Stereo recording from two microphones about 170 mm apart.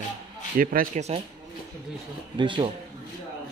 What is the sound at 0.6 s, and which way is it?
Speech, 55° right (ahead or behind).